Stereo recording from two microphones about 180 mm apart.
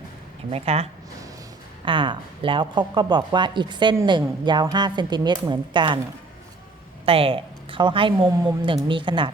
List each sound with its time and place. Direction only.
0.5 s a woman's voice: 35° right (ahead or behind)
7.0 s a woman's voice: 30° right (ahead or behind)